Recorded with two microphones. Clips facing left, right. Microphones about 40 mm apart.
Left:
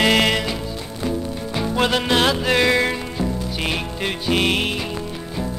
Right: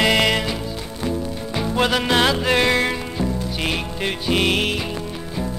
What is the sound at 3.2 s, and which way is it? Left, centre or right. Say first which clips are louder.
Music: right 1 dB; centre.